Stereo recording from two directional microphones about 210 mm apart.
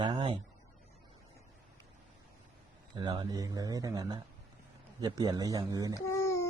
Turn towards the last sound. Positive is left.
turn(degrees=15)  # may be behind; listen again after turning